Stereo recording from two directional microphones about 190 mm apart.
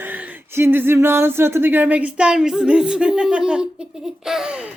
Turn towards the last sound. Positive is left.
turn(degrees=-5)  # may be behind; listen again after turning